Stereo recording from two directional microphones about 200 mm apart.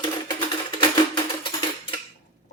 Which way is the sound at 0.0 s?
25° left (ahead or behind).